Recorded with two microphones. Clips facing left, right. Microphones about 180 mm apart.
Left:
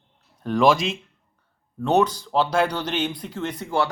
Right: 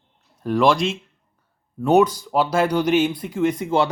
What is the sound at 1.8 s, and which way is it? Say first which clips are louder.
Speech: right 4 dB; 10° right (ahead or behind).